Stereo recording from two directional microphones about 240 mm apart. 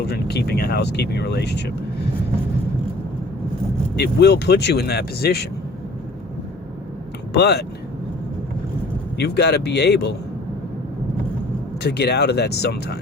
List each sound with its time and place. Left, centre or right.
0.0 s speech: left
3.9 s speech: left
7.3 s speech: left
9.1 s speech: left
11.8 s speech: left